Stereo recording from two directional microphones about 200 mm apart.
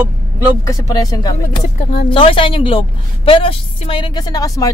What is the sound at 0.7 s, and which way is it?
A woman's voice, 15° left (ahead or behind).